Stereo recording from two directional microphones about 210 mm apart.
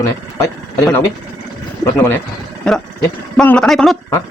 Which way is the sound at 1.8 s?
15° left (ahead or behind).